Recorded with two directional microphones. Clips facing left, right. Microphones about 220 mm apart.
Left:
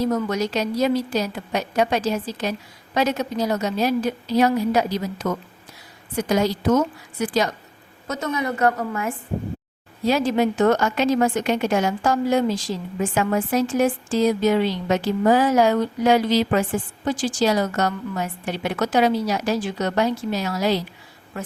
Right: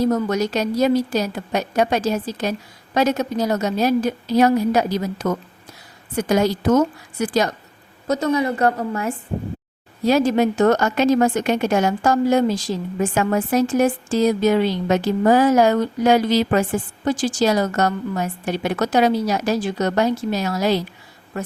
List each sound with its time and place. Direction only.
0.1 s a woman's voice: 45° right (ahead or behind)